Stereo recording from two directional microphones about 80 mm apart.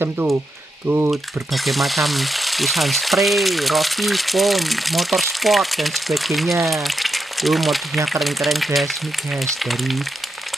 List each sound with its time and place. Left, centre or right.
0.0 s speech: right
1.5 s speech: centre